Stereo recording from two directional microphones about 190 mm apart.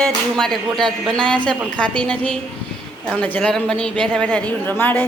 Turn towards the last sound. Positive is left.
turn(degrees=10)  # may be behind; listen again after turning